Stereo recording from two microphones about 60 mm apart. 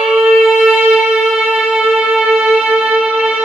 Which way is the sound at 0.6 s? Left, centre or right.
Centre.